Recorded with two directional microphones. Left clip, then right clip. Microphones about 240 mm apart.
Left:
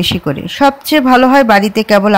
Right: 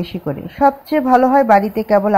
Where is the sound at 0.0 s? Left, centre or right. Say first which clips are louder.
Left 9 dB; left.